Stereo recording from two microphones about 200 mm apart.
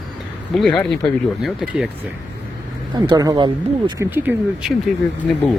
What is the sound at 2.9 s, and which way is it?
Speech, 20° right (ahead or behind).